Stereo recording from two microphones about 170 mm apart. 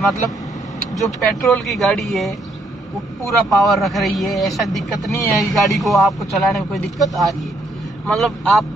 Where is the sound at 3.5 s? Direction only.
Centre (ahead or behind).